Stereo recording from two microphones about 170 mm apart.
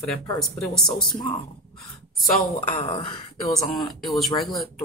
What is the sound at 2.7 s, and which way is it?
Speech, 30° left (ahead or behind).